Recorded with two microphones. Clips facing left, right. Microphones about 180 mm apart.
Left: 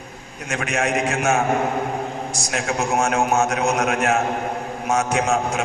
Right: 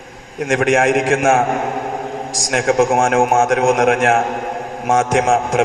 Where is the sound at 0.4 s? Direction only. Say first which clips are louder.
Right 11 dB; 90° right.